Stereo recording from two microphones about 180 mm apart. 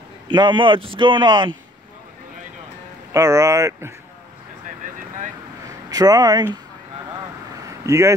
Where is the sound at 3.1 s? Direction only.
20° right (ahead or behind).